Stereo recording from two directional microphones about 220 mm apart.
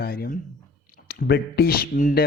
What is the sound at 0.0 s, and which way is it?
Speech, 45° left (ahead or behind).